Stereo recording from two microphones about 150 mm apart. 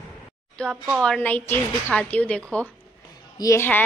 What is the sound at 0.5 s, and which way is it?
A woman's voice, 5° left (ahead or behind).